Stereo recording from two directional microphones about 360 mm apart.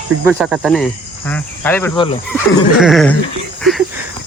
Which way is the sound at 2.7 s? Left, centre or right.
Centre.